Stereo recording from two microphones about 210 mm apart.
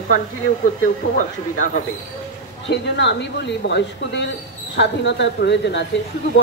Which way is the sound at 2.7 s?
55° left (ahead or behind).